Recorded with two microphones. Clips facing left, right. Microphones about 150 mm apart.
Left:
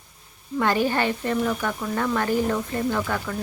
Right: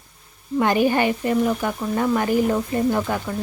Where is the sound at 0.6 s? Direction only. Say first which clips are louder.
Right 4 dB; 15° right (ahead or behind).